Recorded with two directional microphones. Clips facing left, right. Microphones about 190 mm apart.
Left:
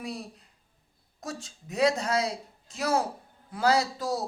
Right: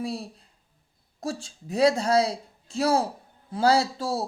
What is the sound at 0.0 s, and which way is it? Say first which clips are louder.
A man's voice: right 5 dB; 30° right (ahead or behind).